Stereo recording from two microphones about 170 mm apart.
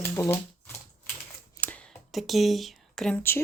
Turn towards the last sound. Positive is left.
turn(degrees=10)  # may be behind; listen again after turning